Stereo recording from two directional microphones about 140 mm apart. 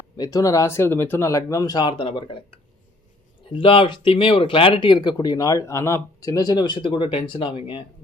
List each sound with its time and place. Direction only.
0.2 s speech: 25° left (ahead or behind)
3.5 s speech: 40° left (ahead or behind)